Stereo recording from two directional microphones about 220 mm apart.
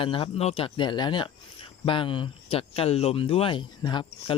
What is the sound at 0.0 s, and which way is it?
Speech, 25° left (ahead or behind).